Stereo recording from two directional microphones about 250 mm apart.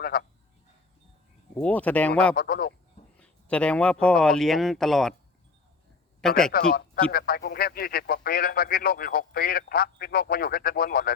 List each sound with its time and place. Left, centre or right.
0.0 s a sound: left
1.5 s speech: centre
2.3 s speech: left
3.2 s a sound: centre
4.0 s speech: centre
6.5 s speech: left